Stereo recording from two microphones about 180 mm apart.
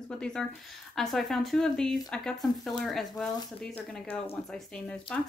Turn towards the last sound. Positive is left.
turn(degrees=5)  # may be behind; listen again after turning